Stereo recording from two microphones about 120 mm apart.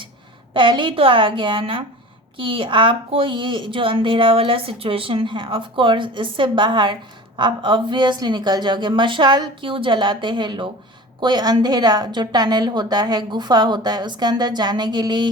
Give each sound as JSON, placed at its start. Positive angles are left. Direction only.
{"t": 0.5, "sound": "a woman's voice", "side_deg": -40}